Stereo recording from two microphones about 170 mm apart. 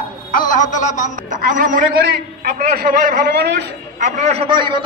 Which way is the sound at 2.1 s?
65° right (ahead or behind).